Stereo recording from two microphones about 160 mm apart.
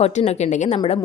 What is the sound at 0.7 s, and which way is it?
Speech, 35° left (ahead or behind).